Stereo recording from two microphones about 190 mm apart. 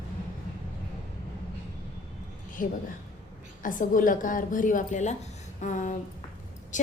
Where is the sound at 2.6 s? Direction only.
45° left (ahead or behind).